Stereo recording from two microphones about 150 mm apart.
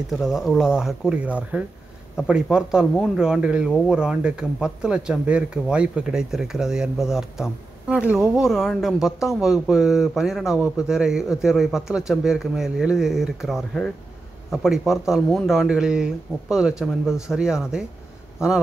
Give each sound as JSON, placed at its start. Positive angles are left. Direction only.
{"t": 0.2, "sound": "speech", "side_deg": 0}